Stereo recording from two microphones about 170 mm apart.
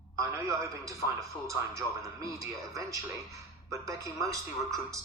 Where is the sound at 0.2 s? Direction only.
20° right (ahead or behind).